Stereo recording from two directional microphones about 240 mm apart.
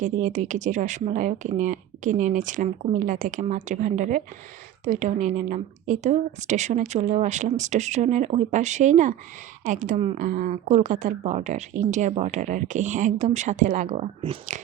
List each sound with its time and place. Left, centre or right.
0.0 s a woman's voice: right